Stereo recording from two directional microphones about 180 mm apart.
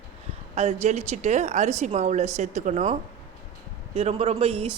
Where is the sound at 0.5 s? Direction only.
35° right (ahead or behind).